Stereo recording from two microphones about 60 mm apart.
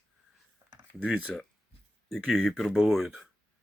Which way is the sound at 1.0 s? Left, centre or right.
Centre.